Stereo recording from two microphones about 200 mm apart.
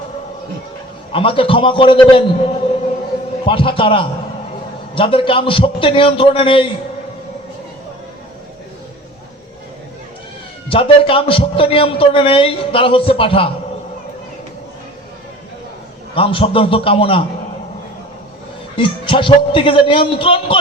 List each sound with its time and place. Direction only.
1.1 s a man's voice: 25° left (ahead or behind)
3.4 s a man's voice: 25° left (ahead or behind)
10.7 s a man's voice: 25° left (ahead or behind)
16.1 s a man's voice: 25° left (ahead or behind)
18.8 s a man's voice: 25° left (ahead or behind)